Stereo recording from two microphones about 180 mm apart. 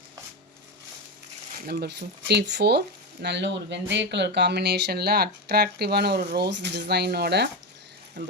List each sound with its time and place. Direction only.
1.6 s speech: 60° right (ahead or behind)